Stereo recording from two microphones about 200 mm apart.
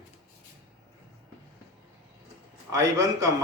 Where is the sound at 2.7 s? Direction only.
15° right (ahead or behind).